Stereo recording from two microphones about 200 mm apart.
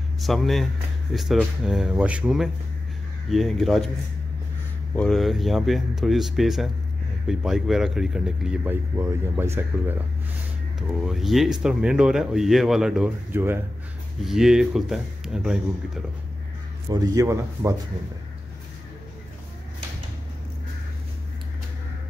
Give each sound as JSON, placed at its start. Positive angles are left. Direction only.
{"t": 0.2, "sound": "speech", "side_deg": 0}
{"t": 4.9, "sound": "speech", "side_deg": 5}
{"t": 8.9, "sound": "speech", "side_deg": -15}
{"t": 16.9, "sound": "speech", "side_deg": -15}